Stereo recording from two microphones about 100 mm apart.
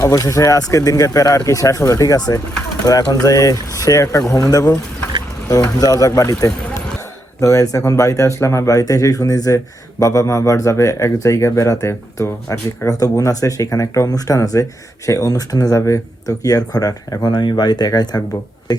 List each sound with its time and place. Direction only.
0.0 s speech: 35° left (ahead or behind)